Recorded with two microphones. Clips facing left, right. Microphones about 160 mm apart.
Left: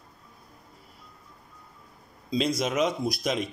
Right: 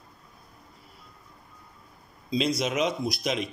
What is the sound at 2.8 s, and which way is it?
Speech, 50° left (ahead or behind).